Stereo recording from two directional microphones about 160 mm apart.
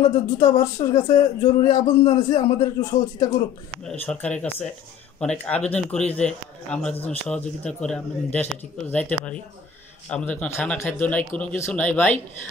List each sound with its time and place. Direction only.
0.0 s speech: 25° left (ahead or behind)
3.8 s a man's voice: 5° left (ahead or behind)